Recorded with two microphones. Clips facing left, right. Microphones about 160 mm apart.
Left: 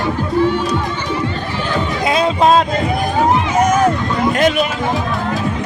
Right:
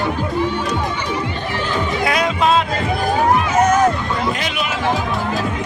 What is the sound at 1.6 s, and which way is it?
Run, 20° left (ahead or behind).